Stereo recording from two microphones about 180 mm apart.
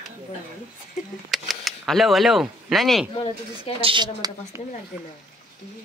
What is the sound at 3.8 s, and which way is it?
Speech, 25° right (ahead or behind).